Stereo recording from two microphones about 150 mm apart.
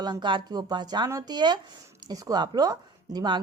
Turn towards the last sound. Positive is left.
turn(degrees=-25)  # may be behind; listen again after turning